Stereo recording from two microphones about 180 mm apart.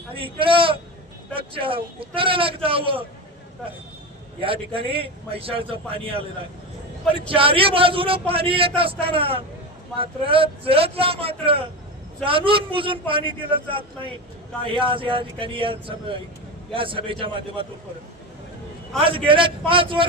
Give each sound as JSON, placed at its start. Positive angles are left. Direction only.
{"t": 0.1, "sound": "a man's voice", "side_deg": -30}
{"t": 4.4, "sound": "a man's voice", "side_deg": -30}
{"t": 18.9, "sound": "a man's voice", "side_deg": -30}